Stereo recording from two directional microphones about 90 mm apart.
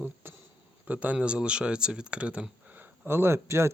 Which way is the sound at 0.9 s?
20° right (ahead or behind).